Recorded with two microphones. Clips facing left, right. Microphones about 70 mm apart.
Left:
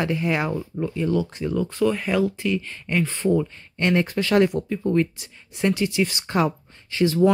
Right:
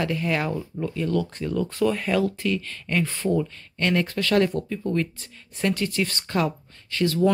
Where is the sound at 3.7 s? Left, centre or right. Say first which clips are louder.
Left 2 dB; centre.